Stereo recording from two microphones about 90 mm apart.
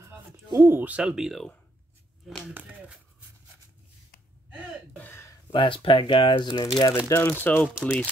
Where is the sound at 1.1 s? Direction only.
Centre (ahead or behind).